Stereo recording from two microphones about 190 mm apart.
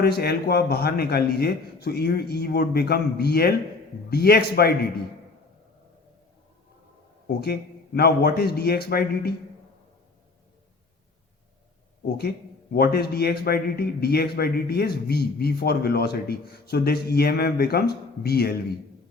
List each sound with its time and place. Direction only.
0.0 s speech: 55° left (ahead or behind)
7.3 s speech: 55° left (ahead or behind)
12.0 s speech: 55° left (ahead or behind)